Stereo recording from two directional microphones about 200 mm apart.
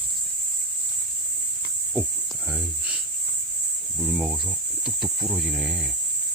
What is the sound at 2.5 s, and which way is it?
Cricket, 5° left (ahead or behind).